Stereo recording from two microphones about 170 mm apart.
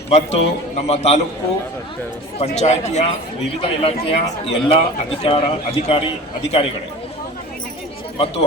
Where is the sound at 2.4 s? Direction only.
40° left (ahead or behind).